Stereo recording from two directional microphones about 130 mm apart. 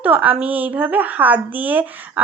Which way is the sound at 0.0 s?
10° right (ahead or behind).